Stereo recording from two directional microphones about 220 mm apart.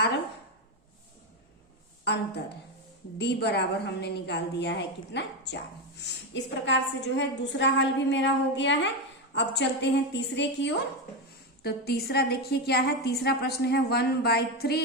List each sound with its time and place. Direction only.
3.2 s a woman's voice: 50° left (ahead or behind)